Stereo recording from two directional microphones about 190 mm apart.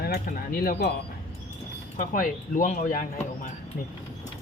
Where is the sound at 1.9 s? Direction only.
45° left (ahead or behind).